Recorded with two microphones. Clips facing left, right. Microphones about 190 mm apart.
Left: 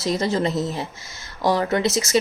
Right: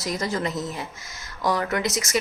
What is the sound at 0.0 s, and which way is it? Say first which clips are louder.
Speech: left 5 dB; 25° left (ahead or behind).